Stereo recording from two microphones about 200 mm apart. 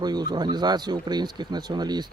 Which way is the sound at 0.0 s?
20° right (ahead or behind).